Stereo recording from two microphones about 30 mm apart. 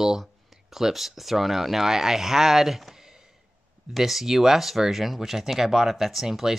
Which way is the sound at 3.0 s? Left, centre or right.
Centre.